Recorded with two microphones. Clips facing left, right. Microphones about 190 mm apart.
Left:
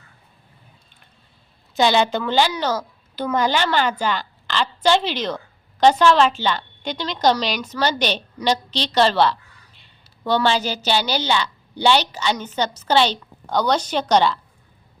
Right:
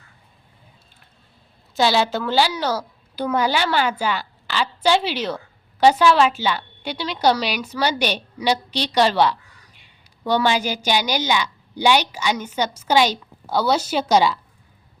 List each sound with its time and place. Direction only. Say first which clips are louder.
1.7 s a woman's voice: left 1 dB; 5° right (ahead or behind)